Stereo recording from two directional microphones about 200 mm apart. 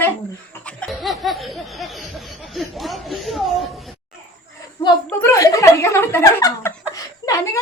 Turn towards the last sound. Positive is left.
turn(degrees=15)  # may be behind; listen again after turning